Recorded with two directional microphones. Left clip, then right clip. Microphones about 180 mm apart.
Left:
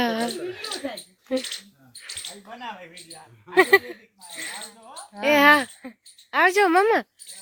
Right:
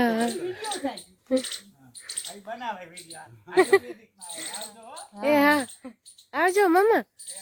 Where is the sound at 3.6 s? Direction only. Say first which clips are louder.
Left 3 dB; 5° right (ahead or behind).